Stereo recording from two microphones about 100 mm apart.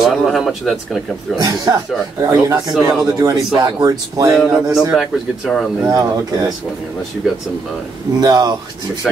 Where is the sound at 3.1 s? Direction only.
40° right (ahead or behind).